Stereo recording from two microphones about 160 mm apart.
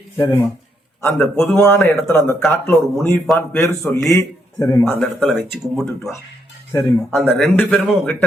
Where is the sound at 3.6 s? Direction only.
20° left (ahead or behind).